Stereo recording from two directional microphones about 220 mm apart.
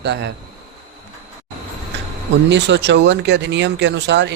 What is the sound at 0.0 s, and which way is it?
Speech, 50° right (ahead or behind).